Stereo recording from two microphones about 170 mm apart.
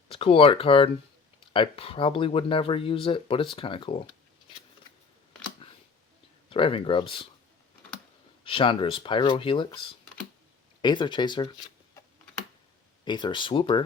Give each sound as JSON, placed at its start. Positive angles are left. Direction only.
{"t": 0.1, "sound": "speech", "side_deg": 35}
{"t": 6.5, "sound": "speech", "side_deg": 30}
{"t": 8.4, "sound": "speech", "side_deg": 30}
{"t": 13.1, "sound": "speech", "side_deg": 30}